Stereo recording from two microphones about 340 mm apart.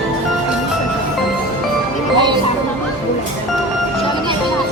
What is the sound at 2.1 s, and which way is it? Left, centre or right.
Music, centre.